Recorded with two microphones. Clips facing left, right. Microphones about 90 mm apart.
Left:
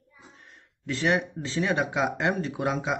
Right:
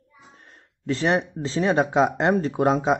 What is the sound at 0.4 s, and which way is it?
Speech, 40° right (ahead or behind).